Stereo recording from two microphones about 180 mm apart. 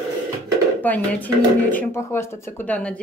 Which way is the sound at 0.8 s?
10° left (ahead or behind).